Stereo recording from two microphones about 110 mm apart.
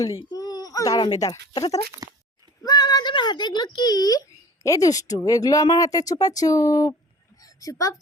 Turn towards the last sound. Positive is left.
turn(degrees=30)  # may be behind; listen again after turning